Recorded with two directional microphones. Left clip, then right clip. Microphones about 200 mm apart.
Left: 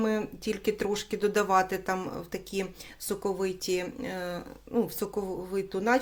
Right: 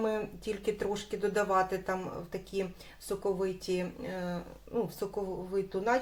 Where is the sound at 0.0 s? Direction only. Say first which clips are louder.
Left 3 dB; 45° left (ahead or behind).